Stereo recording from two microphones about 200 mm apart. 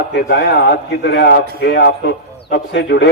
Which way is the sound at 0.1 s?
60° left (ahead or behind).